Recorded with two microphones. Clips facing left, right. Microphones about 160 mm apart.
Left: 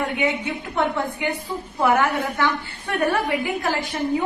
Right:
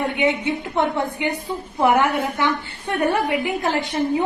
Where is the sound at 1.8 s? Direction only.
20° right (ahead or behind).